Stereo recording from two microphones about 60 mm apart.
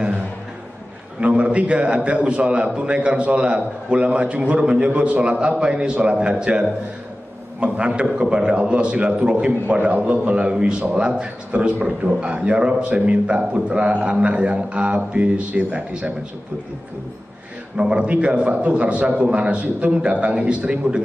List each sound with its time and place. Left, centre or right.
1.2 s a man's voice: right
17.7 s a man's voice: centre